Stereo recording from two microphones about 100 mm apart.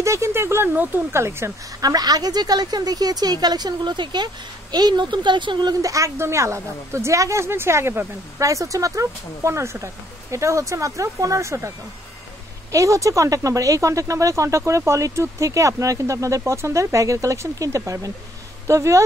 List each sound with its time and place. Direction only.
0.0 s a woman's voice: 30° right (ahead or behind)
1.8 s speech: 40° right (ahead or behind)
5.8 s a woman's voice: 35° right (ahead or behind)
12.7 s speech: 30° right (ahead or behind)